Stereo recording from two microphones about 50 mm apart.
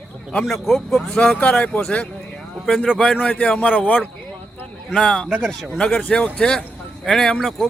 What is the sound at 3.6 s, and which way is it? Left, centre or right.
Speech, left.